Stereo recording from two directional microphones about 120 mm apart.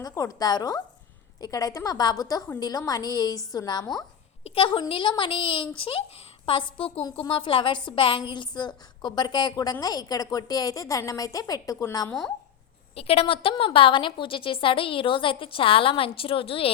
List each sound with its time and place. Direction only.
0.0 s a woman's voice: 30° left (ahead or behind)
4.4 s a woman's voice: 50° left (ahead or behind); by 12.1 s 25° left (ahead or behind)
13.0 s a woman's voice: 55° left (ahead or behind)